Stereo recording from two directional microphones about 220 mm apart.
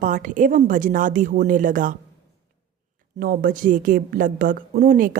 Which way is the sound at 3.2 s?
40° right (ahead or behind).